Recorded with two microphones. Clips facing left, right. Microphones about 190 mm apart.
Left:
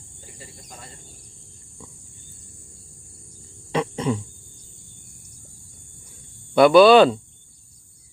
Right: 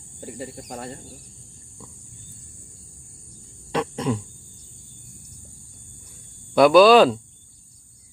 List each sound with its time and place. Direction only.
0.2 s speech: 60° right (ahead or behind)
3.7 s a sound: centre (ahead or behind)
6.5 s speech: centre (ahead or behind)